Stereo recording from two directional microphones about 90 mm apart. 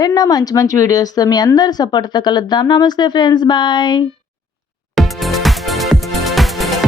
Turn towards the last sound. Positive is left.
turn(degrees=0)  # may be behind; listen again after turning